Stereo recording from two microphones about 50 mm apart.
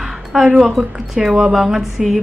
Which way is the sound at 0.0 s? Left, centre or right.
Centre.